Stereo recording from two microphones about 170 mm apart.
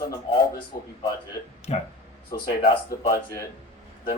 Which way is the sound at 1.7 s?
40° left (ahead or behind).